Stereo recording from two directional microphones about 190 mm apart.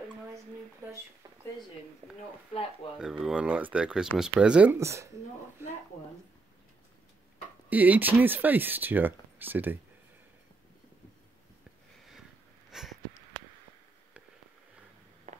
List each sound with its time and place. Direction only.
2.0 s speech: 35° right (ahead or behind)
3.0 s speech: centre (ahead or behind)
7.7 s speech: 10° right (ahead or behind)
12.7 s sniff: centre (ahead or behind)
15.3 s walk: 40° right (ahead or behind)